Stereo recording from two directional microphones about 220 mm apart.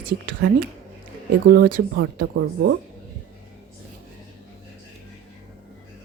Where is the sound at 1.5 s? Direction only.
45° right (ahead or behind).